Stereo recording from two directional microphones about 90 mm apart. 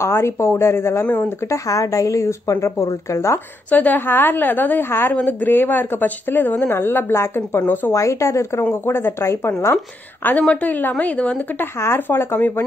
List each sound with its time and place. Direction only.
0.0 s a woman's voice: 30° left (ahead or behind)
3.7 s speech: 20° left (ahead or behind)
7.9 s a woman's voice: 35° left (ahead or behind)
10.5 s a woman's voice: 15° left (ahead or behind)
11.8 s speech: 25° left (ahead or behind)